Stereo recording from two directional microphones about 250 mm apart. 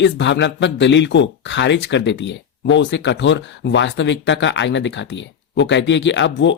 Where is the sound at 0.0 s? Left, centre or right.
Left.